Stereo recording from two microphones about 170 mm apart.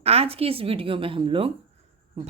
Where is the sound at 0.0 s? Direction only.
35° right (ahead or behind).